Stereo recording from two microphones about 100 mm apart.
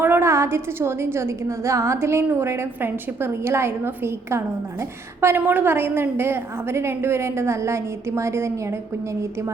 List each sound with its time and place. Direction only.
0.0 s a woman's voice: 25° right (ahead or behind)